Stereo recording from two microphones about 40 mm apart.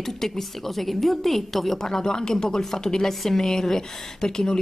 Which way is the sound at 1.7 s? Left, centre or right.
Centre.